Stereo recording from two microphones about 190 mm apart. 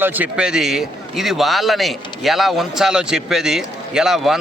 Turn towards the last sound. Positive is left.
turn(degrees=0)  # may be behind; listen again after turning